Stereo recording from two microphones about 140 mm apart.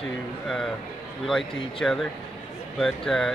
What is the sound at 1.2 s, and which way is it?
Speech, 5° left (ahead or behind).